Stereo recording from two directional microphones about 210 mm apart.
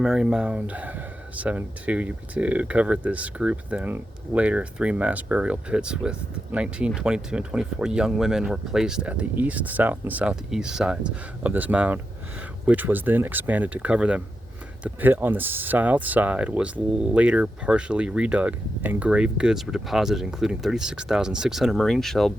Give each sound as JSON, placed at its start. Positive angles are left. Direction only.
{"t": 0.0, "sound": "speech", "side_deg": -5}